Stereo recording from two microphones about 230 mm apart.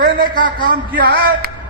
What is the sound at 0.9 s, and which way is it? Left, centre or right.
Speech, right.